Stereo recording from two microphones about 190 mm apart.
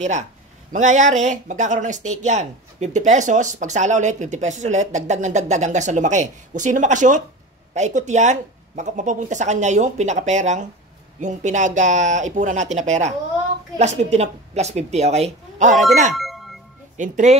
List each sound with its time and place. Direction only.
0.7 s speech: 40° right (ahead or behind)
16.2 s a sound: centre (ahead or behind)
16.9 s speech: 40° right (ahead or behind)